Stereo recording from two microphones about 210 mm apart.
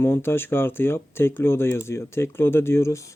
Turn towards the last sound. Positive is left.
turn(degrees=15)  # may be behind; listen again after turning